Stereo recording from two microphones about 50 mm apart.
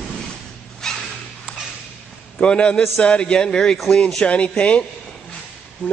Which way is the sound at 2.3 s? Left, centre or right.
Left.